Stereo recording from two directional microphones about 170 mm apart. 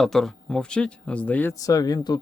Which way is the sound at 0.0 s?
Centre (ahead or behind).